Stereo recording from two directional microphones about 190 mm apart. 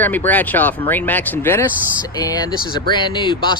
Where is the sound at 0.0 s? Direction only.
10° left (ahead or behind).